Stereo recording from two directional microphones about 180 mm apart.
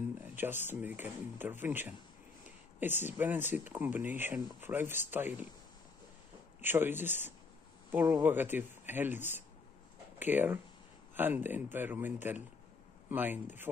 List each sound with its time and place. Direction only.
0.2 s speech: 10° right (ahead or behind)
6.6 s speech: 10° right (ahead or behind)